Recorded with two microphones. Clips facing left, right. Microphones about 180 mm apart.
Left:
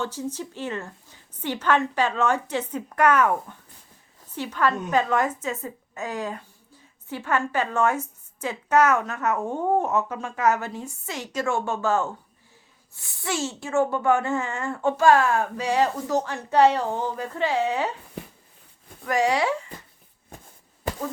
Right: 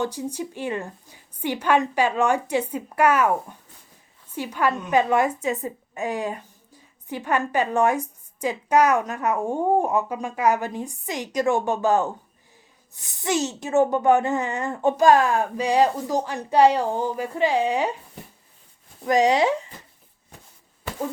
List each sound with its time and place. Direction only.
0.0 s a woman's voice: 15° right (ahead or behind)
4.4 s a woman's voice: 10° right (ahead or behind)
19.0 s speech: 20° right (ahead or behind)